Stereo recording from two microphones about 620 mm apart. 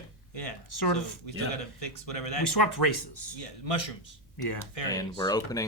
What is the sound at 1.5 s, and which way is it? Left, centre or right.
Speech, left.